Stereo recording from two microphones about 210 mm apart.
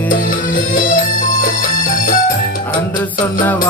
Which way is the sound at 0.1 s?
40° left (ahead or behind).